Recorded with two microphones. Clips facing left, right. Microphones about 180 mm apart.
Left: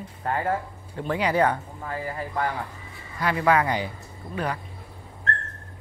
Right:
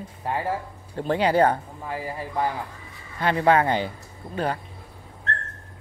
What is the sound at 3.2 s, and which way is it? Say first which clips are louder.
Speech: right 2 dB; 30° right (ahead or behind).